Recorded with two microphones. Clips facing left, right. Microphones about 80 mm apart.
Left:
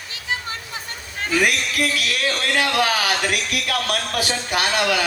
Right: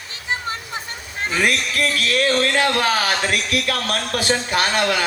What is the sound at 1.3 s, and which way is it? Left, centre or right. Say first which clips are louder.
A man's voice: even; right.